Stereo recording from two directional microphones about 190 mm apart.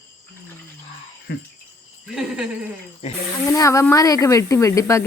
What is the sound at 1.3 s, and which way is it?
Cricket, 55° left (ahead or behind).